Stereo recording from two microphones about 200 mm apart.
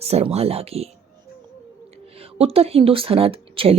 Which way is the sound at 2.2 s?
30° right (ahead or behind).